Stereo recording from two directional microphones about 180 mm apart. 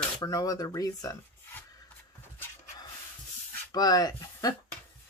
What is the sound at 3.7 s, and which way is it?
Speech, 20° left (ahead or behind).